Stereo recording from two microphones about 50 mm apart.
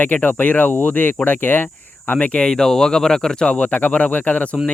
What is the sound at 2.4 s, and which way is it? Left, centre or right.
Speech, centre.